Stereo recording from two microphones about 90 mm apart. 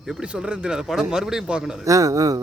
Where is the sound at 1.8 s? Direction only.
40° right (ahead or behind).